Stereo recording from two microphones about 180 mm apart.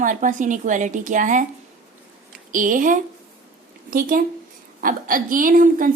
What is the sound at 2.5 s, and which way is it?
Speech, 45° right (ahead or behind).